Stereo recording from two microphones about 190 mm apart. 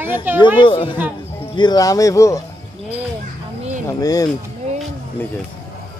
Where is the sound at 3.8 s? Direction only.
20° left (ahead or behind).